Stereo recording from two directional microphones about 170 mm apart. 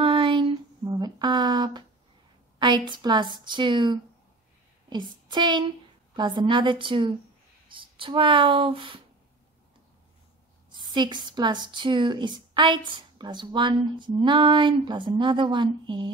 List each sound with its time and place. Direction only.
0.0 s a sound: 30° right (ahead or behind)
2.6 s a woman's voice: 25° right (ahead or behind)
10.7 s speech: 25° right (ahead or behind)